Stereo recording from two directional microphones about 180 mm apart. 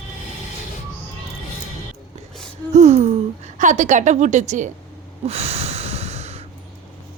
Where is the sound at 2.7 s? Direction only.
40° right (ahead or behind).